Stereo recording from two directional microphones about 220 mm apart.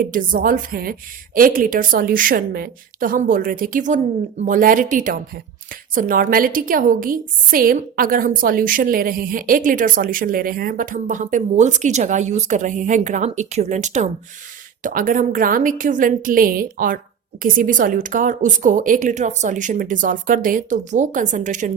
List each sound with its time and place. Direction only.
0.0 s a woman's voice: 40° right (ahead or behind)